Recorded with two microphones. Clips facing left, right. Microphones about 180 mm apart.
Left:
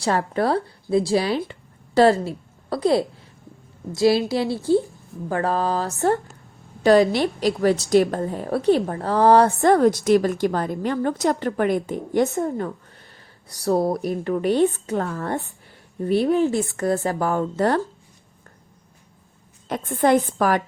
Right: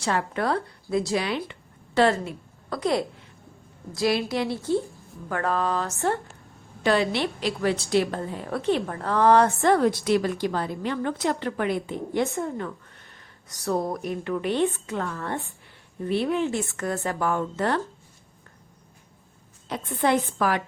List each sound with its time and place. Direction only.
0.0 s a woman's voice: 35° left (ahead or behind)
19.6 s a woman's voice: 50° left (ahead or behind)